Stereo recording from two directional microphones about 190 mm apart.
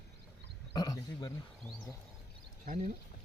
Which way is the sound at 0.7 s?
20° left (ahead or behind).